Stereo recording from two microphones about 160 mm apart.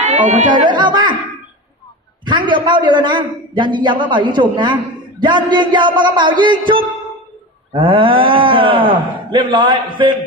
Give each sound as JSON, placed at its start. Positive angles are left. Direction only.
{"t": 0.0, "sound": "music", "side_deg": -50}
{"t": 0.5, "sound": "a man's voice", "side_deg": -30}
{"t": 2.2, "sound": "a man's voice", "side_deg": -30}